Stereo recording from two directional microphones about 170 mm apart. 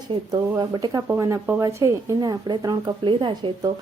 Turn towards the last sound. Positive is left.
turn(degrees=-25)  # may be behind; listen again after turning